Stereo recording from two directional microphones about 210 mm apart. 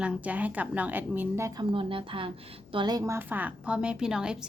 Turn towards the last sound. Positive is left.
turn(degrees=-5)  # may be behind; listen again after turning